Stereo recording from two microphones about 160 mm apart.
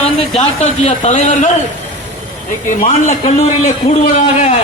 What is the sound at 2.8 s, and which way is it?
Speech, 40° left (ahead or behind).